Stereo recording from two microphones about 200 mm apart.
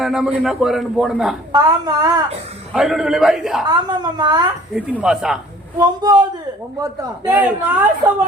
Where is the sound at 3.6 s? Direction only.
20° right (ahead or behind).